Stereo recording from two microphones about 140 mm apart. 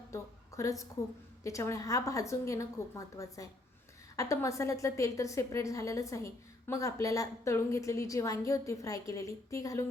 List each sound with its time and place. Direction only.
0.1 s a woman's voice: 20° left (ahead or behind)